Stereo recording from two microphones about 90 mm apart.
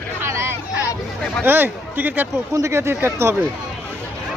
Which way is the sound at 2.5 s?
30° right (ahead or behind).